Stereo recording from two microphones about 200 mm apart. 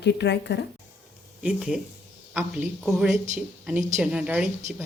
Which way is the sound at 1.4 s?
5° right (ahead or behind).